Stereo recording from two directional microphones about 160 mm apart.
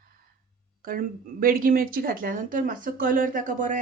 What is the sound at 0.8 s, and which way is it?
Speech, 65° right (ahead or behind).